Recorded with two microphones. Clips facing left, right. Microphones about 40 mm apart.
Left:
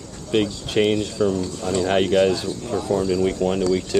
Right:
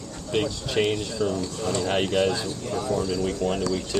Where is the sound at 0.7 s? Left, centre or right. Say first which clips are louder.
Left 5 dB; left.